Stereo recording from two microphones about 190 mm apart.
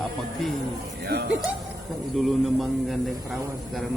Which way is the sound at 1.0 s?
60° right (ahead or behind).